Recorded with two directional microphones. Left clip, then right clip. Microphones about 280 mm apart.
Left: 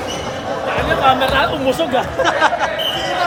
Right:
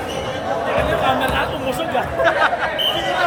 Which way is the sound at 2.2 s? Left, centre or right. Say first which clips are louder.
Left 1 dB; centre.